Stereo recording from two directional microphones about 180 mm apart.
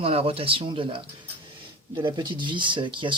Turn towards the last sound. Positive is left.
turn(degrees=-25)  # may be behind; listen again after turning